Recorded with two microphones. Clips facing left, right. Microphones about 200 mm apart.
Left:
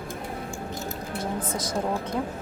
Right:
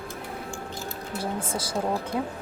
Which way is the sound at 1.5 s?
30° right (ahead or behind).